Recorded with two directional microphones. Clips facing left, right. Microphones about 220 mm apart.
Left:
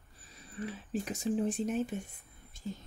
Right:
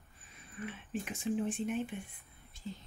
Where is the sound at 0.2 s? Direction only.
35° left (ahead or behind).